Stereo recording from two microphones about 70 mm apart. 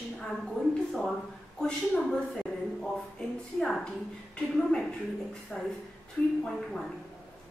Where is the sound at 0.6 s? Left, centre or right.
Centre.